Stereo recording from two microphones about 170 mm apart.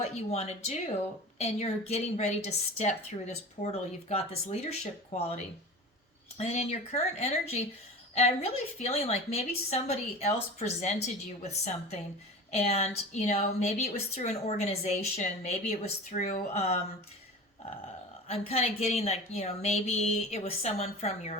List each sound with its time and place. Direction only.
0.0 s a woman's voice: 40° left (ahead or behind)
18.3 s a woman's voice: 35° left (ahead or behind)